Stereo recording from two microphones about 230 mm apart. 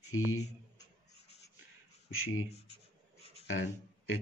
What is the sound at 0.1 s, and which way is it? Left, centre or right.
Speech, left.